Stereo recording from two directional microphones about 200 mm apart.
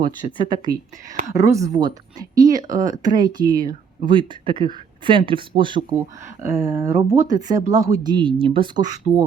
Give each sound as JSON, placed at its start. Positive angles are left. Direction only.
{"t": 0.3, "sound": "speech", "side_deg": -20}